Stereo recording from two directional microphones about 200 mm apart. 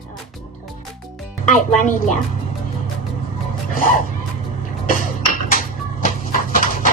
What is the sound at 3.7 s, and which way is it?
Music, 40° left (ahead or behind).